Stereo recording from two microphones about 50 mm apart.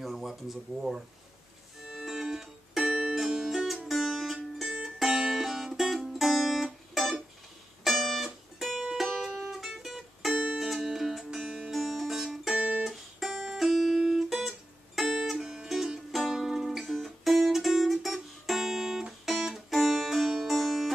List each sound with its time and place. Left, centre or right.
0.0 s speech: centre
1.9 s music: centre
10.3 s music: centre
10.6 s music: centre
12.5 s music: centre
12.8 s guitar: centre
13.9 s music: centre